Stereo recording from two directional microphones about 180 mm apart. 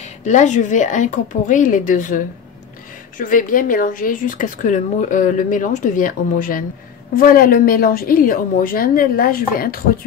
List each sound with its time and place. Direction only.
0.0 s speech: 40° left (ahead or behind)